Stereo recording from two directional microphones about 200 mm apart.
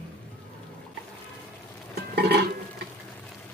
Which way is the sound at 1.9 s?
55° right (ahead or behind).